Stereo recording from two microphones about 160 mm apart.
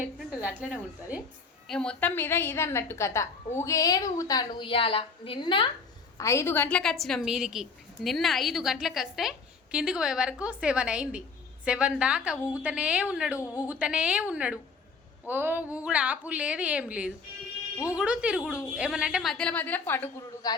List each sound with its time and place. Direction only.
0.0 s a sound: 5° right (ahead or behind)
1.6 s a woman's voice: 5° left (ahead or behind); by 5.7 s 30° left (ahead or behind)
6.1 s a woman's voice: 20° left (ahead or behind)